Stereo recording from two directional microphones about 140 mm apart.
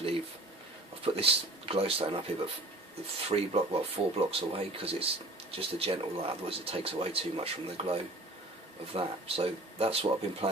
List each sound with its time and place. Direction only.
1.0 s speech: 40° right (ahead or behind)
3.2 s speech: 45° right (ahead or behind)